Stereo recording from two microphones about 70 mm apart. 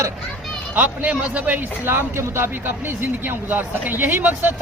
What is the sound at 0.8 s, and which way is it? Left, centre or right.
A man's voice, right.